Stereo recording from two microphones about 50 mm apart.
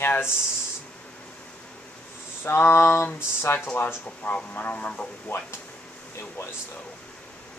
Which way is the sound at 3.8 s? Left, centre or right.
Left.